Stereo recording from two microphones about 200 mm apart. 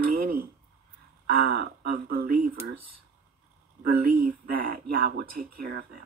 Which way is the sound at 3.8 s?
45° right (ahead or behind).